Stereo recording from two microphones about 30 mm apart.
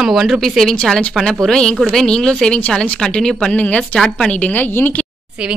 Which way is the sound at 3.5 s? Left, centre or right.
Left.